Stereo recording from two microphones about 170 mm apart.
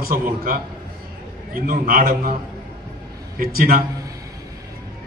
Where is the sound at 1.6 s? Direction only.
55° right (ahead or behind).